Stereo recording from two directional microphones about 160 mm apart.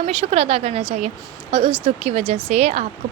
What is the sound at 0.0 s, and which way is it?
Speech, 40° right (ahead or behind).